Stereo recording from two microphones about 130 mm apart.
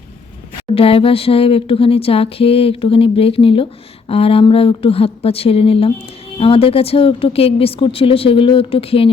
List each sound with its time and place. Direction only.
0.7 s speech: 45° left (ahead or behind)